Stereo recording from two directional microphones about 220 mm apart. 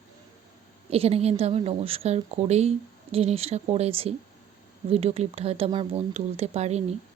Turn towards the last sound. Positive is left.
turn(degrees=-30)  # may be behind; listen again after turning